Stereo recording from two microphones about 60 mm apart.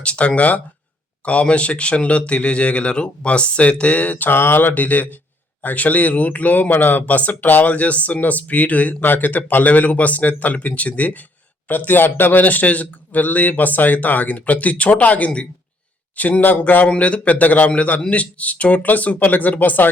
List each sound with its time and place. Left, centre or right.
0.0 s speech: centre
16.4 s speech: left